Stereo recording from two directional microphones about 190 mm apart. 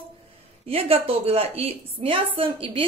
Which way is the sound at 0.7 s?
30° right (ahead or behind).